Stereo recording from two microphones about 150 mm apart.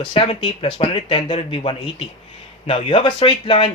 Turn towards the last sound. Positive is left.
turn(degrees=35)  # may be behind; listen again after turning